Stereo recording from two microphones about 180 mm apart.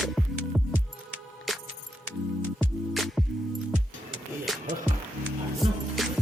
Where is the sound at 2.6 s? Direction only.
Centre (ahead or behind).